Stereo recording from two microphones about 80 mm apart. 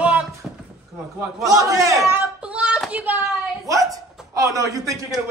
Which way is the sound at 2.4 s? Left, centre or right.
Centre.